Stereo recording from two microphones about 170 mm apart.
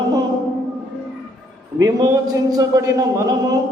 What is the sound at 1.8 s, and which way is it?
A man's voice, 20° right (ahead or behind).